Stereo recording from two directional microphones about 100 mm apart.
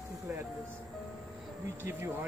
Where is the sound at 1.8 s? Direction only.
25° right (ahead or behind).